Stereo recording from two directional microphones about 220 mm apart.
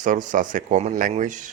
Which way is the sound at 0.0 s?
35° right (ahead or behind).